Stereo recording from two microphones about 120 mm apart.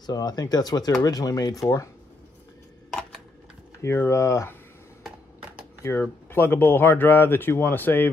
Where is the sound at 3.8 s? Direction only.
20° left (ahead or behind).